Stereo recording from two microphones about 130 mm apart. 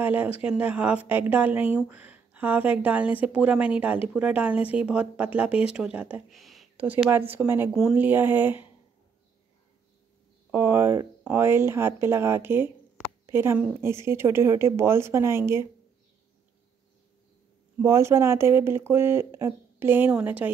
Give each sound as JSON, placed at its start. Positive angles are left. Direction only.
{"t": 0.0, "sound": "a woman's voice", "side_deg": -15}
{"t": 6.3, "sound": "a sound", "side_deg": 0}
{"t": 6.8, "sound": "a woman's voice", "side_deg": -15}
{"t": 10.5, "sound": "a woman's voice", "side_deg": -15}
{"t": 17.7, "sound": "a woman's voice", "side_deg": -20}